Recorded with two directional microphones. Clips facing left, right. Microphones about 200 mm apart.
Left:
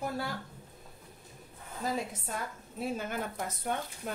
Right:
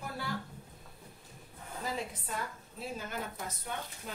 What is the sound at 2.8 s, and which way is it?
Speech, 55° left (ahead or behind).